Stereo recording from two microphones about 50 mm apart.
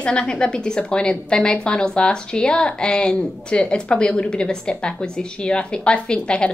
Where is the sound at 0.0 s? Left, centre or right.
Centre.